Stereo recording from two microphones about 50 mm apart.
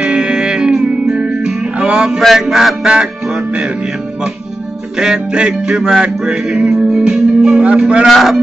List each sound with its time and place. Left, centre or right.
0.0 s music: centre
4.9 s music: centre
7.6 s speech: right
8.1 s cattle: centre